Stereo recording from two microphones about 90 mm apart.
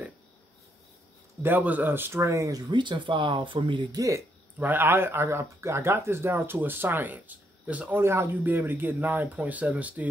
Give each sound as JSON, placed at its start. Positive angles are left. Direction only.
{"t": 1.4, "sound": "a man's voice", "side_deg": -20}
{"t": 2.7, "sound": "speech", "side_deg": -60}
{"t": 4.6, "sound": "a man's voice", "side_deg": -20}
{"t": 8.0, "sound": "a man's voice", "side_deg": -30}